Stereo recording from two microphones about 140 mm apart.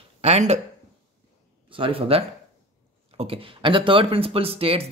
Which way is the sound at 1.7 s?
40° right (ahead or behind).